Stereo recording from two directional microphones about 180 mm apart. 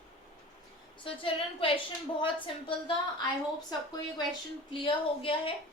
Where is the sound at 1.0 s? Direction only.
30° left (ahead or behind).